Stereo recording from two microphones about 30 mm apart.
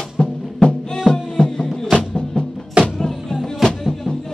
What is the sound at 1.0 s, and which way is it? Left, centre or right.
Music, centre.